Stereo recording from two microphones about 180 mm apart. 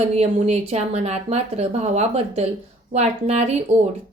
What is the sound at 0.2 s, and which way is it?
A woman's voice, 35° right (ahead or behind).